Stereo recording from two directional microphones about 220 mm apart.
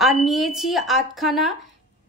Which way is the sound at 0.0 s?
Centre (ahead or behind).